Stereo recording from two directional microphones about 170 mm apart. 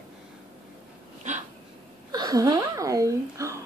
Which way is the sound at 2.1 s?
20° right (ahead or behind).